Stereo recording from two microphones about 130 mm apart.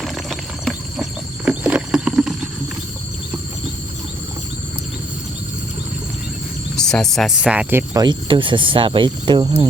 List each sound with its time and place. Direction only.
0.0 s a sound: centre (ahead or behind)
6.7 s speech: 5° left (ahead or behind); by 7.9 s 15° right (ahead or behind)
7.9 s speech: 35° right (ahead or behind)